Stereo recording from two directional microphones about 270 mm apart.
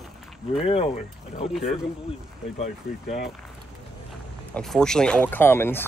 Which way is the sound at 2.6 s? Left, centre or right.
Left.